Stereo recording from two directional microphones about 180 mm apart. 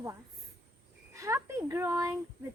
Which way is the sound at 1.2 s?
15° right (ahead or behind).